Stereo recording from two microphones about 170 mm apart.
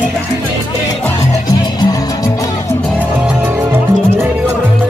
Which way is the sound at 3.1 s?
10° right (ahead or behind).